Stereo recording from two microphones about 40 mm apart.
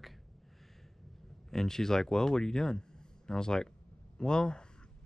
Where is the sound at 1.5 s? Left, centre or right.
Centre.